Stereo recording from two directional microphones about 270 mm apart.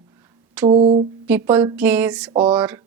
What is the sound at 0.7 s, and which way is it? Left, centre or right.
Mantra, right.